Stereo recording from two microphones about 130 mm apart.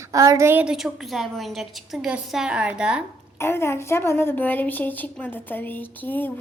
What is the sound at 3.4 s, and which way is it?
A woman's voice, 20° left (ahead or behind).